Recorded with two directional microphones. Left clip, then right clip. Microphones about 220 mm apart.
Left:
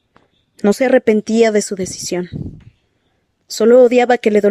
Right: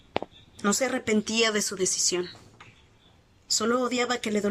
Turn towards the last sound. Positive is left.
turn(degrees=40)  # may be behind; listen again after turning